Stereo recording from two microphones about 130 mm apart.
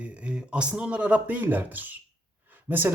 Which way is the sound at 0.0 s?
10° right (ahead or behind).